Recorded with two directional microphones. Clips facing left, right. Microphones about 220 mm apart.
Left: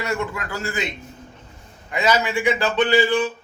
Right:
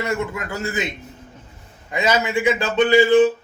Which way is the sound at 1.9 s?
25° right (ahead or behind).